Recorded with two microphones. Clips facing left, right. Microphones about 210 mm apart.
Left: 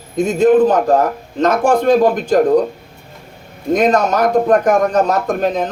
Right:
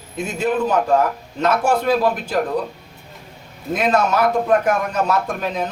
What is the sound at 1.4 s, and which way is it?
Speech, 45° left (ahead or behind).